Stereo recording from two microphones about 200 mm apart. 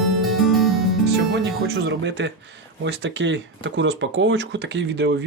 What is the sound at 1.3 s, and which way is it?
Speech, 60° right (ahead or behind).